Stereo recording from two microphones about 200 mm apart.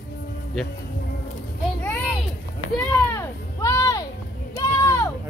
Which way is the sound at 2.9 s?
15° left (ahead or behind).